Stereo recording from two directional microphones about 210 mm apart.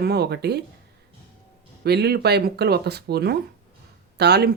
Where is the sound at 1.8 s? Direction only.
50° right (ahead or behind).